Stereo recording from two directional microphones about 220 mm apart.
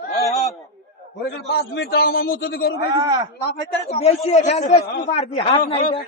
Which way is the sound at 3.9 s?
30° left (ahead or behind).